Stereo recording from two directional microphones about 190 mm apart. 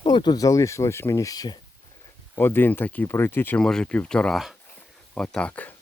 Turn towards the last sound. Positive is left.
turn(degrees=5)  # may be behind; listen again after turning